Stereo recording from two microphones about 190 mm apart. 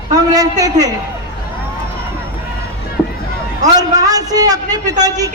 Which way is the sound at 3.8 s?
20° right (ahead or behind).